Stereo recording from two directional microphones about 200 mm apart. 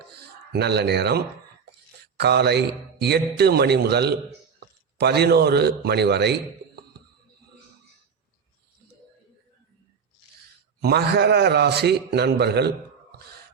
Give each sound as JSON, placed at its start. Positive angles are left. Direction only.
{"t": 0.5, "sound": "a man's voice", "side_deg": -55}
{"t": 10.8, "sound": "a man's voice", "side_deg": -55}